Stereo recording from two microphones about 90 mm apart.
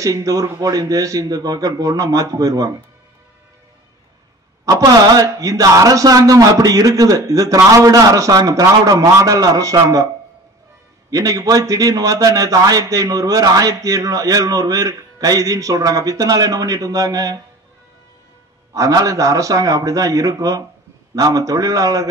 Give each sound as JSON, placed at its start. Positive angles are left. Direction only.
{"t": 0.0, "sound": "a man's voice", "side_deg": -40}
{"t": 4.6, "sound": "a man's voice", "side_deg": -45}
{"t": 11.1, "sound": "a man's voice", "side_deg": -40}
{"t": 18.7, "sound": "a man's voice", "side_deg": -40}